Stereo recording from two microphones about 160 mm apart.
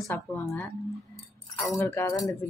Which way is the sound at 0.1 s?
10° left (ahead or behind).